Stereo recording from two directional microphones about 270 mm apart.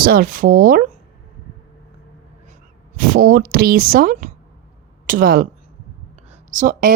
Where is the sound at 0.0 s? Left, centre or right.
Right.